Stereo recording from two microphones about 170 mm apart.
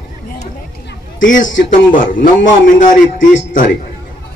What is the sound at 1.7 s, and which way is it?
A man's voice, 50° left (ahead or behind).